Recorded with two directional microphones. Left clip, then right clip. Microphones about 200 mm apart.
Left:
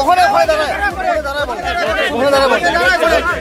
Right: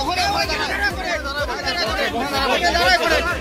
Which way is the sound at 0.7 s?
30° left (ahead or behind).